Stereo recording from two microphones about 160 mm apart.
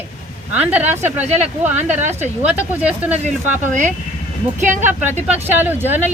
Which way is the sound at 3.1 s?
45° right (ahead or behind).